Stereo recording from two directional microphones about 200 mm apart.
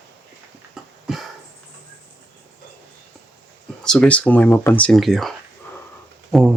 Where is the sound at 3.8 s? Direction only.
5° left (ahead or behind).